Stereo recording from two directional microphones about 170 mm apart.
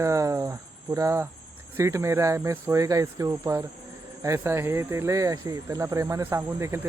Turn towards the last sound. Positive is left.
turn(degrees=-15)  # may be behind; listen again after turning